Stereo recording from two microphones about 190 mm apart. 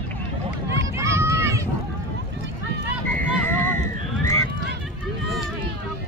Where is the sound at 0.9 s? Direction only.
15° right (ahead or behind).